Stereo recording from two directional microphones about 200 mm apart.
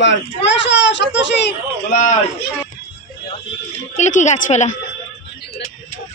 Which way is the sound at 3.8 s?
35° left (ahead or behind).